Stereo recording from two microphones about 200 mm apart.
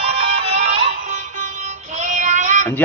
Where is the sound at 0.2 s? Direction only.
30° right (ahead or behind).